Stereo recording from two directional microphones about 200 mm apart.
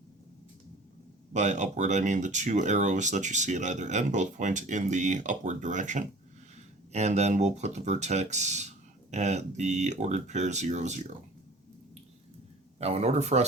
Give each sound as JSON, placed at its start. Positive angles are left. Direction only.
{"t": 1.3, "sound": "speech", "side_deg": -35}
{"t": 12.8, "sound": "speech", "side_deg": -30}